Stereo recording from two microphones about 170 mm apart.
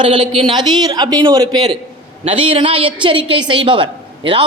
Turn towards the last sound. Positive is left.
turn(degrees=-30)  # may be behind; listen again after turning